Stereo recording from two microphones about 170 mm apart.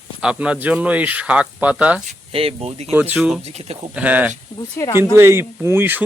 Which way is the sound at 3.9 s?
10° right (ahead or behind).